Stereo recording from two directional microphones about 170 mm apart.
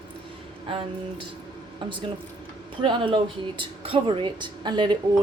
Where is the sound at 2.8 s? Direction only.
30° right (ahead or behind).